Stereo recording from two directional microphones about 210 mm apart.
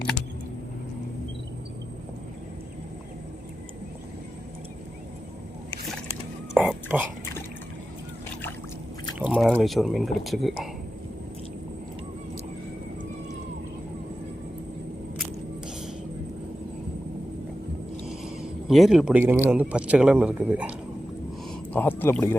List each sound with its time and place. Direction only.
6.5 s whispering: 5° right (ahead or behind)
9.3 s a man's voice: centre (ahead or behind)
18.7 s a man's voice: centre (ahead or behind)
21.5 s speech: 5° left (ahead or behind)